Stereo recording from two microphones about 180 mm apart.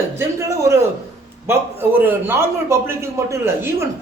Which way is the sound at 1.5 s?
15° right (ahead or behind).